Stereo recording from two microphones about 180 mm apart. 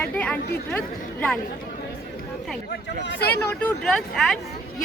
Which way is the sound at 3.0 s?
75° left (ahead or behind).